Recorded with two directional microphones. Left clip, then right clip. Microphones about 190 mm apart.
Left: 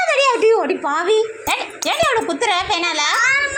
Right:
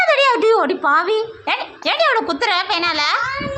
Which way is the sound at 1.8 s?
10° left (ahead or behind).